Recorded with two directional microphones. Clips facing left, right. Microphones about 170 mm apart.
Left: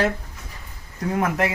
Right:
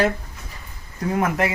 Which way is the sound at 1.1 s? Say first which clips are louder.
Right 1 dB; 5° right (ahead or behind).